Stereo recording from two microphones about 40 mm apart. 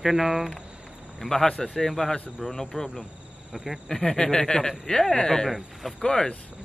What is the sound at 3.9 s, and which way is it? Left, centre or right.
Speech, centre.